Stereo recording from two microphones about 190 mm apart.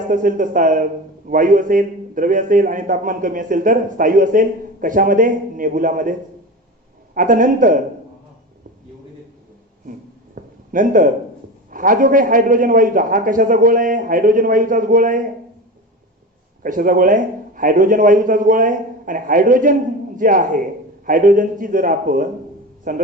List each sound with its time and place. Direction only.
0.1 s a man's voice: 45° right (ahead or behind)
10.3 s a sound: 45° right (ahead or behind)
11.7 s a man's voice: 45° right (ahead or behind)
16.6 s a man's voice: 45° right (ahead or behind)